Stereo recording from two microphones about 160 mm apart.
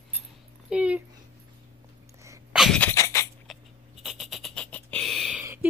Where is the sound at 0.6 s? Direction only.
5° right (ahead or behind).